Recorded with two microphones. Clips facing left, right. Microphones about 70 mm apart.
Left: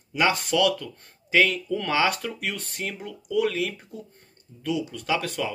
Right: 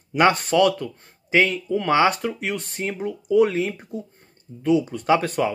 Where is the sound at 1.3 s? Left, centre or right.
Right.